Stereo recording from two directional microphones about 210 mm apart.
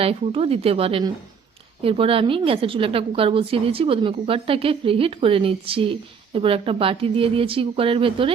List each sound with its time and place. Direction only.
0.0 s a woman's voice: 30° right (ahead or behind)